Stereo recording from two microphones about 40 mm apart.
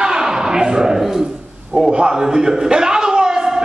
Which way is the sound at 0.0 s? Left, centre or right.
Centre.